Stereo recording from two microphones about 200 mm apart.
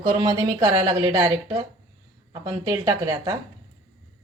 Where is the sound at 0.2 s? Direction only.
20° right (ahead or behind).